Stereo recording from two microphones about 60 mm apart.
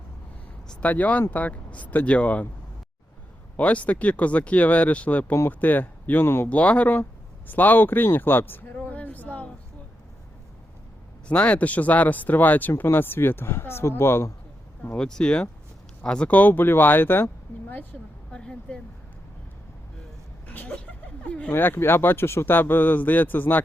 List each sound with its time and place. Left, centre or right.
0.8 s speech: left
3.6 s speech: left
6.2 s speech: left
6.5 s speech: left
11.3 s speech: left
14.9 s speech: centre
16.3 s speech: left
18.3 s speech: centre
20.5 s a sound: left
21.5 s speech: left